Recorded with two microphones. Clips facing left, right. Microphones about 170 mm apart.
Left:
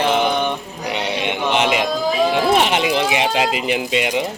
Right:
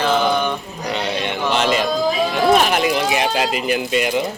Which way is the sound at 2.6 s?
25° left (ahead or behind).